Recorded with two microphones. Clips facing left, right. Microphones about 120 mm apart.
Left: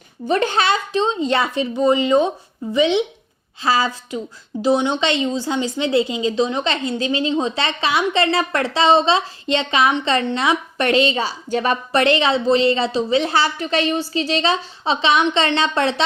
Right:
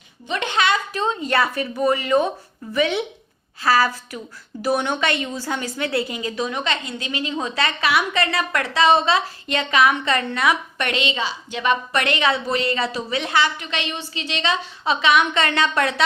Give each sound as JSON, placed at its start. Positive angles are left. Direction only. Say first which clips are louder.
{"t": 0.3, "sound": "a woman's voice", "louder": "left 4 dB", "side_deg": 40}